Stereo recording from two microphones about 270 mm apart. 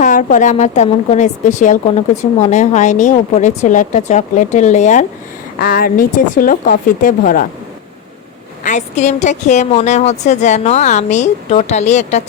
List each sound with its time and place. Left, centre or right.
0.0 s a woman's voice: left
8.6 s a woman's voice: left